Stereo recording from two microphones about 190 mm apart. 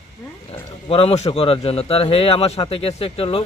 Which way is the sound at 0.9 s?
30° left (ahead or behind).